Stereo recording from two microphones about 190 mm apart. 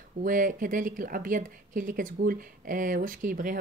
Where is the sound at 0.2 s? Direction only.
45° right (ahead or behind).